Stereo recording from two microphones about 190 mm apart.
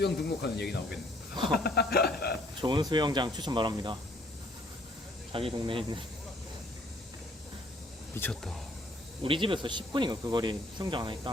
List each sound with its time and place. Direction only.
0.0 s speech: 60° left (ahead or behind)
2.6 s speech: 25° right (ahead or behind)
5.3 s speech: 30° right (ahead or behind)
8.1 s speech: 5° left (ahead or behind)
9.2 s speech: 25° right (ahead or behind)